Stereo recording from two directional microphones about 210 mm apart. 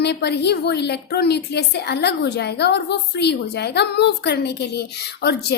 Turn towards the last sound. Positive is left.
turn(degrees=50)  # may be behind; listen again after turning